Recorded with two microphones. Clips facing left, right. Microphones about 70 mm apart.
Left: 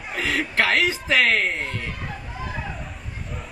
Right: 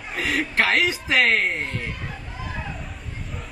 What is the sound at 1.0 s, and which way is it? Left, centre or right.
Speech, centre.